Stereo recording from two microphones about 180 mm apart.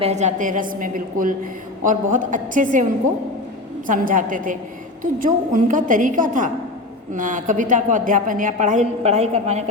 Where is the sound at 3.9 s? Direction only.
45° right (ahead or behind).